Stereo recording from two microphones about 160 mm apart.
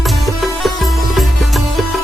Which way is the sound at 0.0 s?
Centre (ahead or behind).